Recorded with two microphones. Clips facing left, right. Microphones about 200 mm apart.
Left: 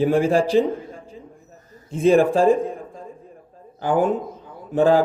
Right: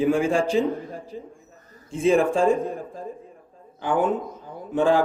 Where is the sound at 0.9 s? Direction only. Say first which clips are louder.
Right 4 dB; 35° right (ahead or behind).